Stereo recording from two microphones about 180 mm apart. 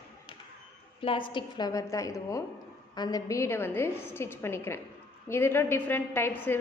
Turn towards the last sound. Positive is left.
turn(degrees=10)  # may be behind; listen again after turning